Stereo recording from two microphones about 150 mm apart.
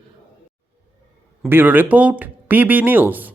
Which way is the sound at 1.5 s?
15° right (ahead or behind).